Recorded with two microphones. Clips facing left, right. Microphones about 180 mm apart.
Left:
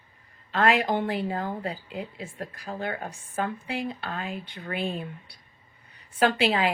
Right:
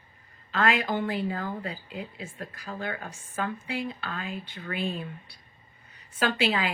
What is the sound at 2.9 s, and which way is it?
Speech, 45° left (ahead or behind).